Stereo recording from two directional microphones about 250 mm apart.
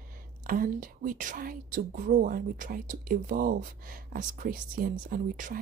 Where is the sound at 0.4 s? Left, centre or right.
Right.